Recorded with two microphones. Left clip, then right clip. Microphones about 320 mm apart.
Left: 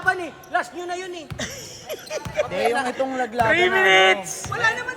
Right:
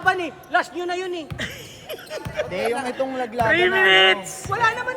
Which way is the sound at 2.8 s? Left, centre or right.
Left.